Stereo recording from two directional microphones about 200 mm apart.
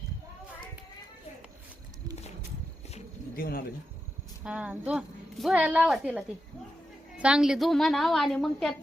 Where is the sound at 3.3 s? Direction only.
50° left (ahead or behind).